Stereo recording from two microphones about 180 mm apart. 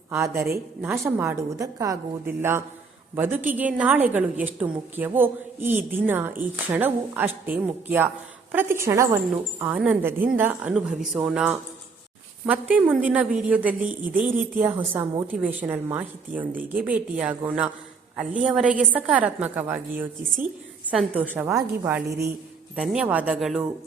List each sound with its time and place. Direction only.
0.1 s a woman's voice: 15° right (ahead or behind)
14.8 s a woman's voice: 20° right (ahead or behind)
15.3 s a woman's voice: 10° right (ahead or behind)